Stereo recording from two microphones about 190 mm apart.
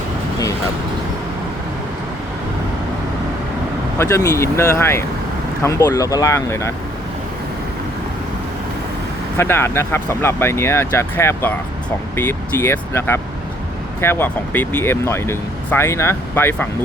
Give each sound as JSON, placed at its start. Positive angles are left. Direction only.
{"t": 3.9, "sound": "speech", "side_deg": 15}
{"t": 9.4, "sound": "speech", "side_deg": 10}